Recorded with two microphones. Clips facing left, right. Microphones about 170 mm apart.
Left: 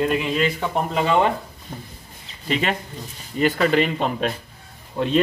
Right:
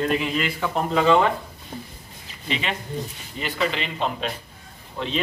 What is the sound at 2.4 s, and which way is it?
Speech, 45° left (ahead or behind).